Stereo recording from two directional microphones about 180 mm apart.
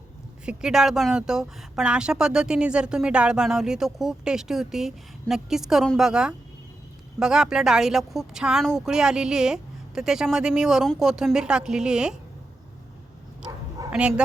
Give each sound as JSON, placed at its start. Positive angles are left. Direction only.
{"t": 0.4, "sound": "speech", "side_deg": -5}
{"t": 13.8, "sound": "dog", "side_deg": -20}